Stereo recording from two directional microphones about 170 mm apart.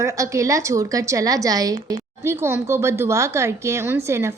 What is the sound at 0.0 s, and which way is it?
A woman's voice, 15° right (ahead or behind).